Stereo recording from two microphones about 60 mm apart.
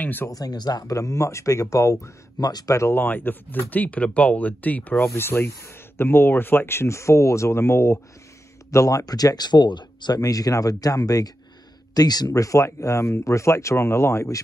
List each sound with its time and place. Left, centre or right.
0.0 s speech: left
0.3 s speech: left
2.4 s speech: left
3.0 s speech: left
5.1 s speech: left
8.7 s speech: left
12.6 s speech: left